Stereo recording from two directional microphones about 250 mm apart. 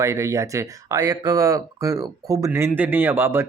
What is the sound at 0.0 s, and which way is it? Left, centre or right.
Speech, centre.